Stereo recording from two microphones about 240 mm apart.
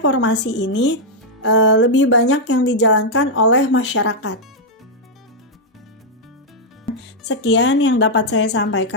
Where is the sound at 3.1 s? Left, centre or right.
Left.